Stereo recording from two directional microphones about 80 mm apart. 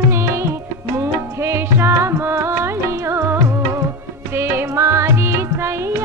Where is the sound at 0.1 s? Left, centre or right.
Right.